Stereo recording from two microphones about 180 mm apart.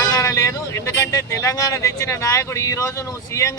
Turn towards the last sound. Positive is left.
turn(degrees=15)  # may be behind; listen again after turning